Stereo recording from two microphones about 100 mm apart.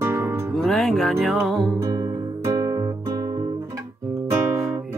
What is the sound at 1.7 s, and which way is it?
Music, 35° right (ahead or behind).